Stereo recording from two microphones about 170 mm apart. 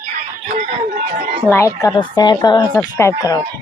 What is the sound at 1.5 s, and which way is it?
Speech, 15° left (ahead or behind).